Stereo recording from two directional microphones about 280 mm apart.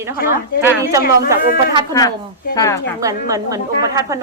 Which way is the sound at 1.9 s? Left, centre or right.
Centre.